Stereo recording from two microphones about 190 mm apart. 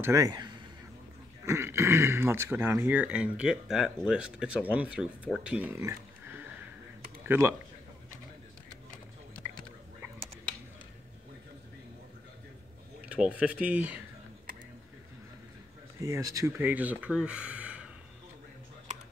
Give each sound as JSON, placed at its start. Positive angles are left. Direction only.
{"t": 0.0, "sound": "speech", "side_deg": -15}
{"t": 13.1, "sound": "speech", "side_deg": -5}
{"t": 16.0, "sound": "speech", "side_deg": -15}